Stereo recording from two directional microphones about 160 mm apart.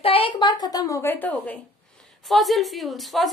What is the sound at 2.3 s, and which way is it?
Speech, centre (ahead or behind).